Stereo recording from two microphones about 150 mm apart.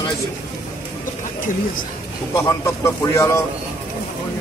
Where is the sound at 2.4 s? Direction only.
20° left (ahead or behind).